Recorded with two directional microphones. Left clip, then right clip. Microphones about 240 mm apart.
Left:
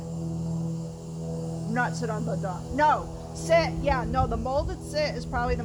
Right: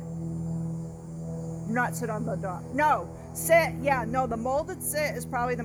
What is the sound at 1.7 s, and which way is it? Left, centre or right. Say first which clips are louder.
Speech: even; right.